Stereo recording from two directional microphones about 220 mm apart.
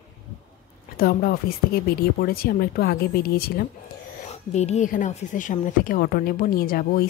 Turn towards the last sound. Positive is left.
turn(degrees=40)  # may be behind; listen again after turning